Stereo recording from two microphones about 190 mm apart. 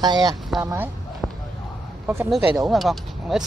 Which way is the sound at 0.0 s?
20° right (ahead or behind).